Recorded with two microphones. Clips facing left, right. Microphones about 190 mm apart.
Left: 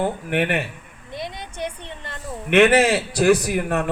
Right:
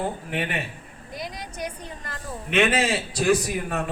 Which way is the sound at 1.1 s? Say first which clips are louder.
Left 3 dB; 25° left (ahead or behind).